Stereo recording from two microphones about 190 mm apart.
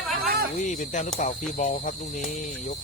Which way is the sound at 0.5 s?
40° left (ahead or behind).